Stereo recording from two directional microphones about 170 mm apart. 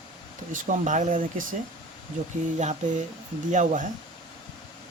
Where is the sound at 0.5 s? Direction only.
45° right (ahead or behind).